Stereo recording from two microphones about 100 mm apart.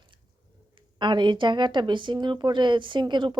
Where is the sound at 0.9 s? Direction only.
50° right (ahead or behind).